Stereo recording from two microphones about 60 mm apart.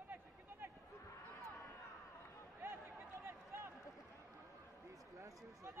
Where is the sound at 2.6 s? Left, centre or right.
Right.